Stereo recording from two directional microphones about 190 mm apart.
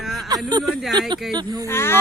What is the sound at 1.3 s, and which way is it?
Speech, 20° right (ahead or behind).